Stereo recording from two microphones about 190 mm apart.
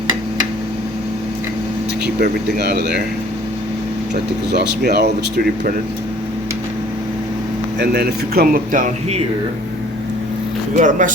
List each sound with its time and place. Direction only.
2.2 s speech: 60° right (ahead or behind)
4.5 s speech: 60° right (ahead or behind)
7.8 s speech: 55° right (ahead or behind); by 9.2 s 40° right (ahead or behind)
10.8 s speech: 40° right (ahead or behind)